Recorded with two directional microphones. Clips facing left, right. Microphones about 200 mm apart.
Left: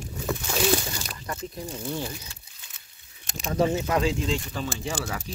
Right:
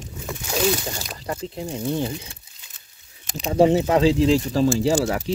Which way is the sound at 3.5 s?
30° right (ahead or behind).